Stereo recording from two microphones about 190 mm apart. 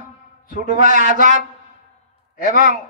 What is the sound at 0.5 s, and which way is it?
Speech, 45° left (ahead or behind).